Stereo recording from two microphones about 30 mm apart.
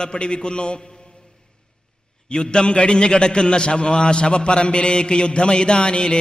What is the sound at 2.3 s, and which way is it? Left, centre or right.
A man's voice, left.